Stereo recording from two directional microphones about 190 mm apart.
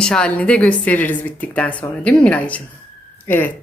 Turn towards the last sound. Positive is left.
turn(degrees=10)  # may be behind; listen again after turning